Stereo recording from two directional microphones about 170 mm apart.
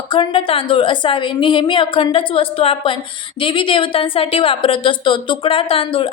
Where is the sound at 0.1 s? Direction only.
30° left (ahead or behind).